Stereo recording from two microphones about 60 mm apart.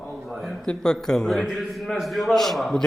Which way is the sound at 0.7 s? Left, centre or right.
Centre.